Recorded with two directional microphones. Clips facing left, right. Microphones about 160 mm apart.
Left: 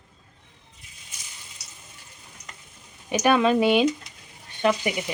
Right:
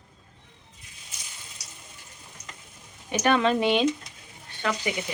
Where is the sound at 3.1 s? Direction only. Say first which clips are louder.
Left 3 dB; 10° left (ahead or behind).